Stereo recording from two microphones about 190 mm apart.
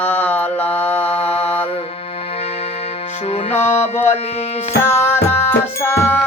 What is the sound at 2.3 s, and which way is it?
Music, 30° left (ahead or behind).